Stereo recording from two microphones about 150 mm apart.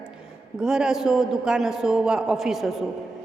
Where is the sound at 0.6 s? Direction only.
5° right (ahead or behind).